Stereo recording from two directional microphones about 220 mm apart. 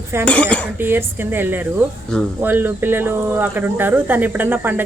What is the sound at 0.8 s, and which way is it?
Speech, 10° right (ahead or behind).